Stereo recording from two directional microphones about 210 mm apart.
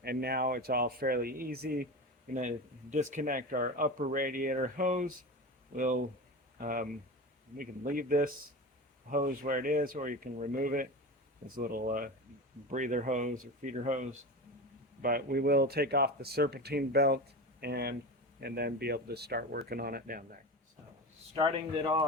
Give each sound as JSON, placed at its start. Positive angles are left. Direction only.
{"t": 0.0, "sound": "speech", "side_deg": -50}
{"t": 21.3, "sound": "speech", "side_deg": -25}